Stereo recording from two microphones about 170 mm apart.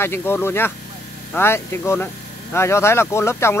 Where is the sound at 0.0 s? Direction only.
15° left (ahead or behind).